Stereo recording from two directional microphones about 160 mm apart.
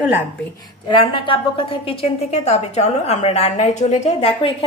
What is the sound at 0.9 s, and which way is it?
A woman's voice, 30° left (ahead or behind).